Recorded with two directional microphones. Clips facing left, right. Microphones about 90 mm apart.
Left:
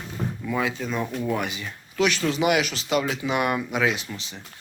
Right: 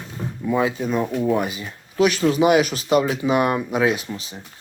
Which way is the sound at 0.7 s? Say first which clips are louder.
Right 5 dB; 15° right (ahead or behind).